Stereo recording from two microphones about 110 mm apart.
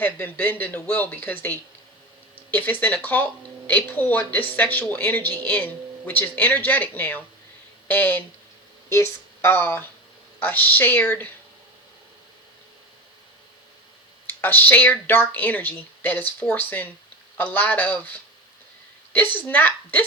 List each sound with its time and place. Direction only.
0.0 s speech: 15° left (ahead or behind)
2.3 s a sound: 15° left (ahead or behind)
2.8 s speech: 15° left (ahead or behind)
14.3 s speech: 15° left (ahead or behind)